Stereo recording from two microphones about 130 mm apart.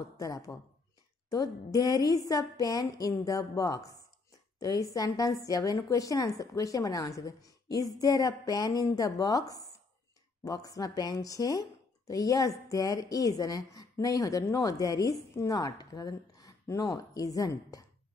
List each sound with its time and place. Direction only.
0.2 s a woman's voice: 30° left (ahead or behind)